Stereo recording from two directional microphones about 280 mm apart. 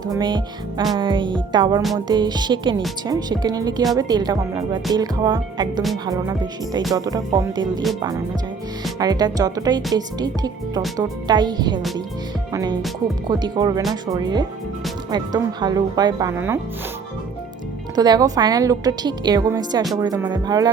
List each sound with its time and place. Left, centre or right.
0.1 s a woman's voice: centre
6.9 s a woman's voice: centre
9.0 s a woman's voice: centre
13.2 s a woman's voice: centre
17.9 s a woman's voice: centre